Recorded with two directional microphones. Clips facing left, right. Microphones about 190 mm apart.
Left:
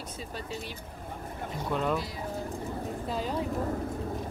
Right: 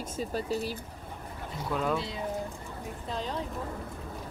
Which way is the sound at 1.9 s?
25° right (ahead or behind).